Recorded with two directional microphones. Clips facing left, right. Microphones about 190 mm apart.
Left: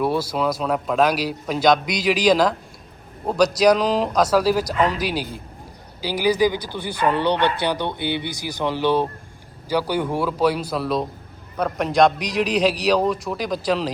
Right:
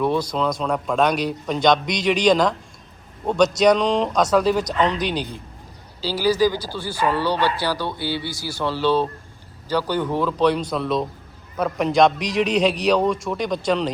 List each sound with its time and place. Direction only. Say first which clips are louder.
0.0 s a man's voice: even; 10° left (ahead or behind)
6.0 s a man's voice: even; 15° left (ahead or behind)